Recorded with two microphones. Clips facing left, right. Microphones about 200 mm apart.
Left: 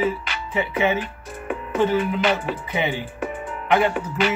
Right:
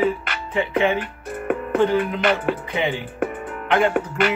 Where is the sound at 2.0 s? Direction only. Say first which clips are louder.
Right 1 dB; 55° right (ahead or behind).